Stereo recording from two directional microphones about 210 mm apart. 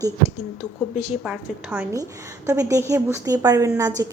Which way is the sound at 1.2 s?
5° right (ahead or behind).